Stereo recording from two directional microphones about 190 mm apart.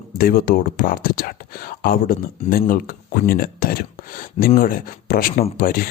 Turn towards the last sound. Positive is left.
turn(degrees=50)  # may be behind; listen again after turning